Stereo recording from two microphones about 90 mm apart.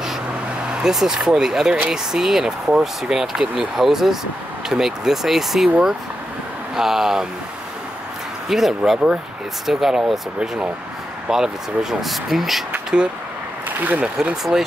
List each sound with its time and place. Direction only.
0.7 s speech: 10° right (ahead or behind)
8.5 s speech: 5° right (ahead or behind); by 14.0 s 20° right (ahead or behind)
14.0 s speech: 5° right (ahead or behind)